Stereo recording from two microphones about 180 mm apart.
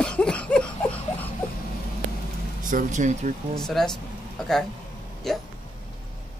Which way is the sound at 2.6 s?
45° right (ahead or behind).